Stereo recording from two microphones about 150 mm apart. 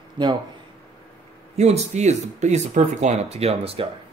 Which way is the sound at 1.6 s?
50° right (ahead or behind).